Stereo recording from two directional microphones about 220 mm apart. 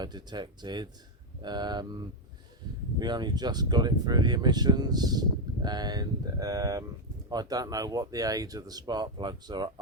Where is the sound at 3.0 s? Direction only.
20° right (ahead or behind).